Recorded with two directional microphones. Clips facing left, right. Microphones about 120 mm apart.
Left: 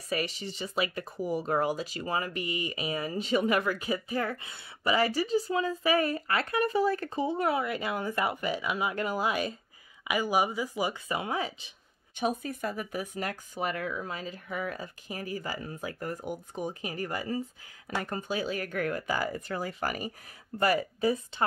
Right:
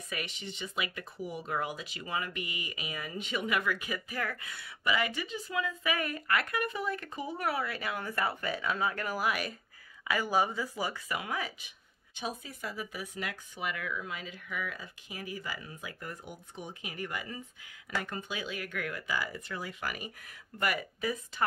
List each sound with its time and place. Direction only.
0.1 s speech: 35° left (ahead or behind)
12.2 s speech: 55° left (ahead or behind); by 21.5 s 30° left (ahead or behind)